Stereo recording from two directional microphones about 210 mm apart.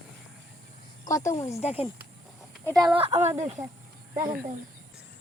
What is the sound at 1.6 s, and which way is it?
Speech, 25° left (ahead or behind).